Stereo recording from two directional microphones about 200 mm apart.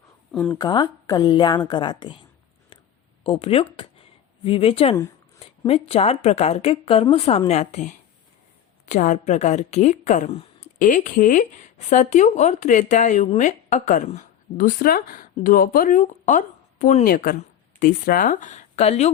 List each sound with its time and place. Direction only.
0.6 s a woman's voice: 20° left (ahead or behind)
3.2 s a woman's voice: 30° left (ahead or behind)